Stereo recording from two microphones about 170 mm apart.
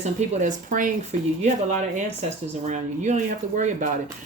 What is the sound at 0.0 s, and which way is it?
Speech, 45° right (ahead or behind).